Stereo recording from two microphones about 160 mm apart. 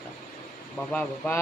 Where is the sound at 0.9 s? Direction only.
10° left (ahead or behind).